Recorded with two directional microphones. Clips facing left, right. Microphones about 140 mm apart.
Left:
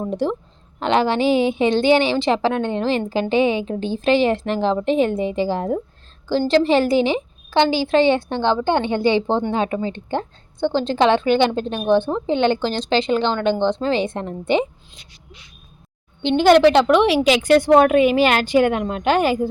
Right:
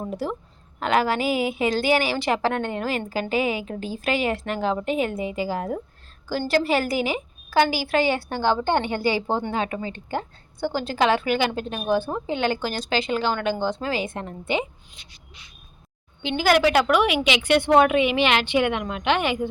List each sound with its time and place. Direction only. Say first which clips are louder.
0.8 s a woman's voice: left 4 dB; 30° left (ahead or behind)
10.2 s a woman's voice: left 4 dB; 5° right (ahead or behind)
10.8 s a woman's voice: left 5 dB; 25° left (ahead or behind)
13.6 s a woman's voice: left 6 dB; 5° right (ahead or behind)
13.8 s a woman's voice: left 6 dB; 30° left (ahead or behind)
16.4 s a woman's voice: left 6 dB; 5° right (ahead or behind)
16.9 s a woman's voice: left 6 dB; 30° left (ahead or behind)